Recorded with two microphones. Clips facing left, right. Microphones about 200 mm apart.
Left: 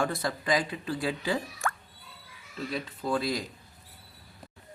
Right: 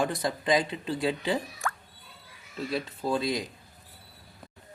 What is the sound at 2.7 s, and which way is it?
Speech, 25° right (ahead or behind).